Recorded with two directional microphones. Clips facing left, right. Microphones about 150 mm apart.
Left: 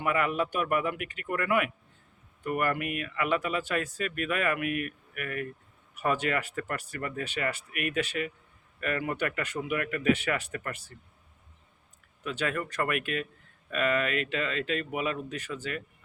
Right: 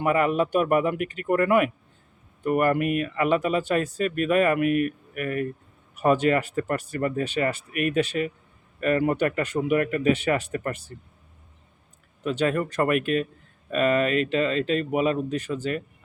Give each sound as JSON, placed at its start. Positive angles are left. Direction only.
{"t": 0.0, "sound": "speech", "side_deg": -30}
{"t": 12.2, "sound": "speech", "side_deg": -30}